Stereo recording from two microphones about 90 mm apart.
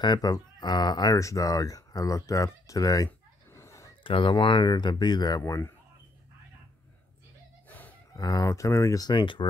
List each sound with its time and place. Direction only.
0.0 s speech: 45° left (ahead or behind)
1.1 s speech: 40° left (ahead or behind)
3.5 s a sound: 35° left (ahead or behind)
4.0 s speech: 70° left (ahead or behind); by 5.4 s 50° left (ahead or behind)
7.6 s a sound: 20° left (ahead or behind)
8.1 s speech: 40° left (ahead or behind)
9.1 s speech: 65° left (ahead or behind)